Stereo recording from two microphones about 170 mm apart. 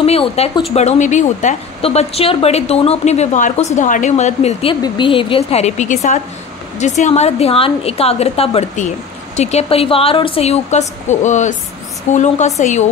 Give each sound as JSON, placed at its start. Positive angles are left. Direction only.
{"t": 0.0, "sound": "a woman's voice", "side_deg": 35}